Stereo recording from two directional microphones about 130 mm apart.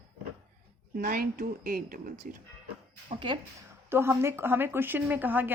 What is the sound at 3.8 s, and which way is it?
Speech, 20° right (ahead or behind).